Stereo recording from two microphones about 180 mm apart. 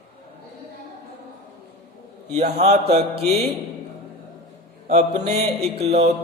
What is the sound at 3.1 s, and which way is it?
Speech, 60° right (ahead or behind).